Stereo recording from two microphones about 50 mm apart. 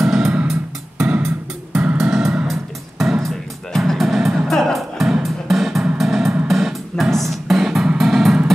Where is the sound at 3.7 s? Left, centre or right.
Centre.